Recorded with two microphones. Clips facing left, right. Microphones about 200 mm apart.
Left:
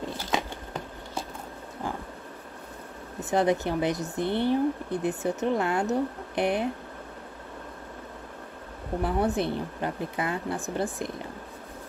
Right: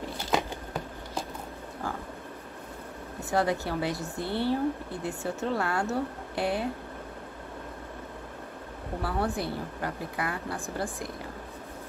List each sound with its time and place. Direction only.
3.2 s speech: 20° left (ahead or behind)
9.0 s speech: 20° left (ahead or behind)